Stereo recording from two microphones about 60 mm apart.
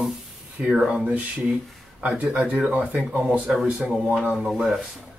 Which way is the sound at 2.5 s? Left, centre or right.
Centre.